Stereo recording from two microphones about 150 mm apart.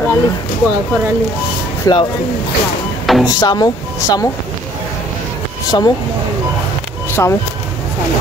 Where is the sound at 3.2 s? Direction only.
25° left (ahead or behind).